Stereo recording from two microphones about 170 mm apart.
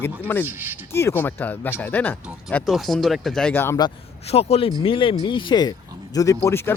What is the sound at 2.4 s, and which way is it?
Speech, centre (ahead or behind).